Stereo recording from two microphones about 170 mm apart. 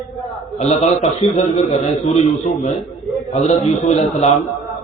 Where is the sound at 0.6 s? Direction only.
40° left (ahead or behind).